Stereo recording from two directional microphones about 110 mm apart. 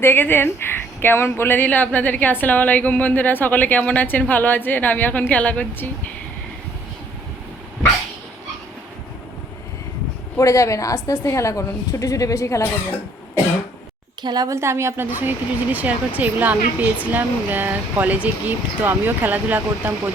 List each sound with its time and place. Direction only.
0.0 s a woman's voice: 20° left (ahead or behind)
10.3 s a woman's voice: 30° left (ahead or behind)
14.2 s speech: 40° right (ahead or behind)
14.5 s speech: 25° right (ahead or behind)